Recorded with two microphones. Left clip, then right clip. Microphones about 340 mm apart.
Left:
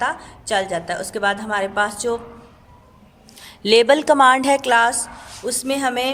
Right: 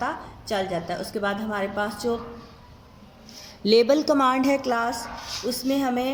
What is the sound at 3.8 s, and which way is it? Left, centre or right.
A woman's voice, left.